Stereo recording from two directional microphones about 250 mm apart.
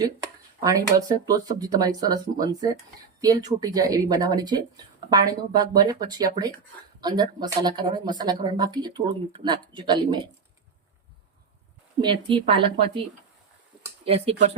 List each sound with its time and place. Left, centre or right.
0.6 s speech: centre
11.9 s speech: centre
14.0 s speech: right